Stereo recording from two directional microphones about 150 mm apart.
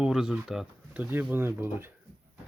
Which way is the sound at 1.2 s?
15° right (ahead or behind).